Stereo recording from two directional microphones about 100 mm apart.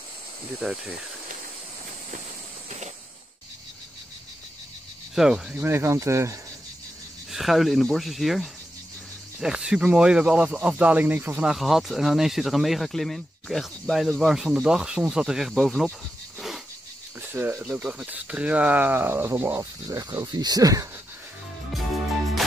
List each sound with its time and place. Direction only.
0.6 s speech: 5° right (ahead or behind)
5.1 s speech: 5° right (ahead or behind)
5.6 s speech: 25° right (ahead or behind)
7.2 s speech: centre (ahead or behind); by 11.4 s 15° right (ahead or behind)
11.4 s speech: centre (ahead or behind)
16.3 s a sound: centre (ahead or behind)
17.2 s speech: 20° right (ahead or behind); by 20.9 s 35° right (ahead or behind)